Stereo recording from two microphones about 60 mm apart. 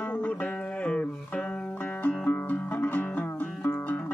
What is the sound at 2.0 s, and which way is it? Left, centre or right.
Music, left.